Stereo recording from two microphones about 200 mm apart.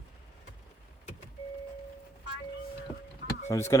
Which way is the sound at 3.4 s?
15° left (ahead or behind).